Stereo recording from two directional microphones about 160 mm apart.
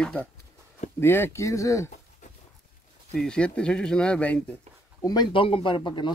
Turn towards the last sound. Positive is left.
turn(degrees=30)  # may be behind; listen again after turning